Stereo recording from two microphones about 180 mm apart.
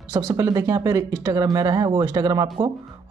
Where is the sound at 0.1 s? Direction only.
20° right (ahead or behind).